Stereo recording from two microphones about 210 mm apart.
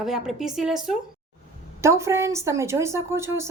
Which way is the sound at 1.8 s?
15° right (ahead or behind).